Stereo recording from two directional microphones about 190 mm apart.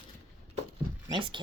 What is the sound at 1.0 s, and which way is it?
Speech, 25° right (ahead or behind).